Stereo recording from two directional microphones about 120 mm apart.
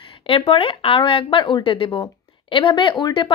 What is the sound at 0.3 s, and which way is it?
Speech, 50° left (ahead or behind).